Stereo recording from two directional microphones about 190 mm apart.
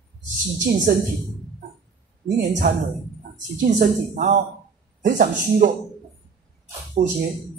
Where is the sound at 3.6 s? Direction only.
45° right (ahead or behind).